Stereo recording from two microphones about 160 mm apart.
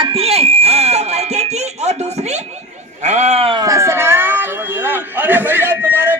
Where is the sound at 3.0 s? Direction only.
45° right (ahead or behind).